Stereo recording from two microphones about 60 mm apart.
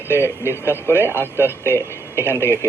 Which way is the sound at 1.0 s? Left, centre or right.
Left.